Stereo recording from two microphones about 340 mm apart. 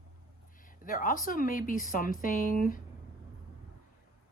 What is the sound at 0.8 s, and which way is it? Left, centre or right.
Speech, left.